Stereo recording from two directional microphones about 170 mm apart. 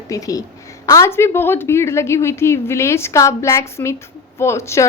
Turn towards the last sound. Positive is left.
turn(degrees=15)  # may be behind; listen again after turning